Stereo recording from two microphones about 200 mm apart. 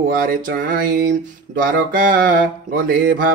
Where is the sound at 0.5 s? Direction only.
45° right (ahead or behind).